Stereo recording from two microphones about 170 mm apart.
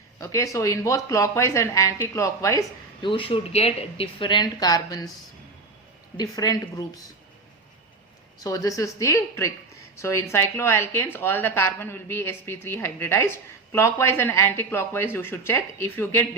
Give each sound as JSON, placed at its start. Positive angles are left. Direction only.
{"t": 0.2, "sound": "speech", "side_deg": 20}
{"t": 6.1, "sound": "speech", "side_deg": 20}
{"t": 8.4, "sound": "a woman's voice", "side_deg": 20}